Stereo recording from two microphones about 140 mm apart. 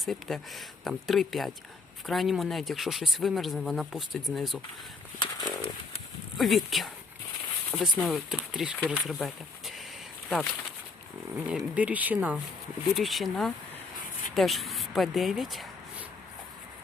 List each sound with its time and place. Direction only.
0.0 s speech: centre (ahead or behind)
5.2 s bird: 35° left (ahead or behind)
6.3 s speech: centre (ahead or behind)
11.4 s speech: 10° right (ahead or behind)
13.0 s speech: centre (ahead or behind)